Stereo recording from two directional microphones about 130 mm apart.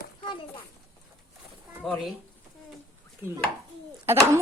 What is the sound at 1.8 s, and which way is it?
Speech, centre (ahead or behind).